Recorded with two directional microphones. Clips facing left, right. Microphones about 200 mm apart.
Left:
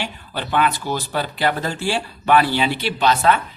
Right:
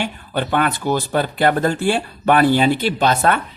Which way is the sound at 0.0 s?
50° right (ahead or behind).